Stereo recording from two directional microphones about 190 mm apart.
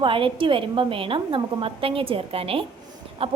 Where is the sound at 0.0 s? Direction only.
25° right (ahead or behind).